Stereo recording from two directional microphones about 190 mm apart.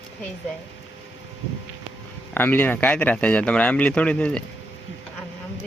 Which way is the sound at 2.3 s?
10° left (ahead or behind).